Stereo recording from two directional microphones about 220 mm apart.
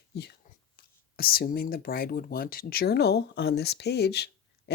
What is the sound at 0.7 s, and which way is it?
Speech, 45° left (ahead or behind).